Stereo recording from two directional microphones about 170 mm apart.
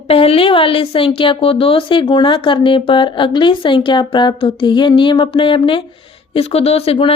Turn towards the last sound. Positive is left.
turn(degrees=35)  # may be behind; listen again after turning